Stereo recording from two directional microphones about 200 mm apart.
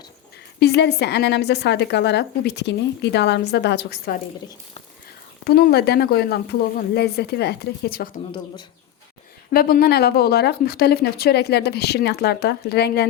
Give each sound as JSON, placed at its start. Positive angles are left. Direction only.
{"t": 0.6, "sound": "a woman's voice", "side_deg": 55}
{"t": 5.5, "sound": "speech", "side_deg": 50}
{"t": 9.5, "sound": "speech", "side_deg": 45}